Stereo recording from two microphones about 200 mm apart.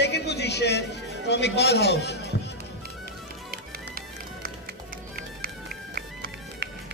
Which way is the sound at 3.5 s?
45° right (ahead or behind).